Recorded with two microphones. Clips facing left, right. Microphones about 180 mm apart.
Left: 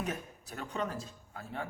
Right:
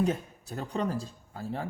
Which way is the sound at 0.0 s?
30° right (ahead or behind).